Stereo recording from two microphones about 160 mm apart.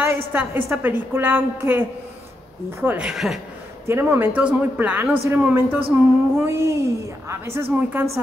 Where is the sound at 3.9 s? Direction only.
15° right (ahead or behind).